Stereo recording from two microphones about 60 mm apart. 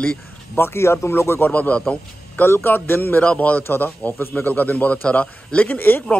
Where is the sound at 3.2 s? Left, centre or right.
Left.